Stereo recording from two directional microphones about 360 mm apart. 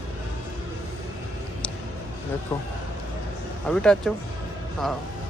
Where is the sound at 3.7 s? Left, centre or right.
Centre.